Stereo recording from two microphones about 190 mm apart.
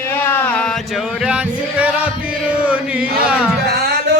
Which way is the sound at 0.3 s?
10° left (ahead or behind).